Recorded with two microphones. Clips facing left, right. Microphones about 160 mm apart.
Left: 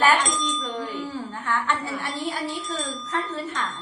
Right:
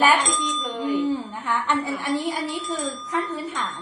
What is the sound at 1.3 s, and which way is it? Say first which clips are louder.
A woman's voice: right 2 dB; 15° right (ahead or behind).